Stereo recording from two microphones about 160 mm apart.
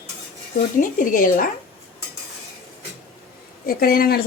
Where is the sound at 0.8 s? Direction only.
60° left (ahead or behind).